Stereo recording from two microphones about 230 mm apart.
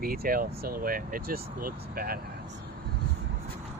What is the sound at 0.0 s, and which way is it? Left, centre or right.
Speech, right.